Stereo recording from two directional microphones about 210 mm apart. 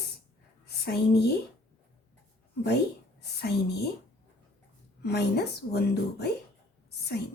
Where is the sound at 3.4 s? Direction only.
50° left (ahead or behind).